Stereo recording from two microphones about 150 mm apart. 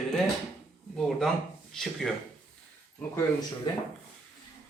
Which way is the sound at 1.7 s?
Centre (ahead or behind).